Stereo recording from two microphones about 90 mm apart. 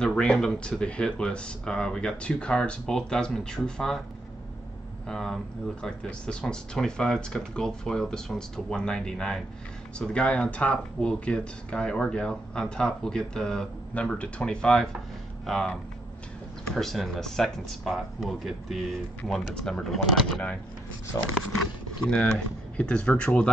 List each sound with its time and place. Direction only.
0.0 s speech: 10° left (ahead or behind)
5.0 s speech: 5° left (ahead or behind)
21.1 s speech: 45° left (ahead or behind)
22.0 s speech: 10° left (ahead or behind)